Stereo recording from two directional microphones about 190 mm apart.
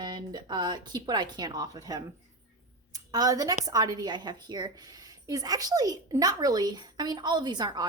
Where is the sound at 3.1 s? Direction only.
20° right (ahead or behind).